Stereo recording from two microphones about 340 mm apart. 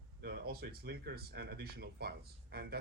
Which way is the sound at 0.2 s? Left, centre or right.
Right.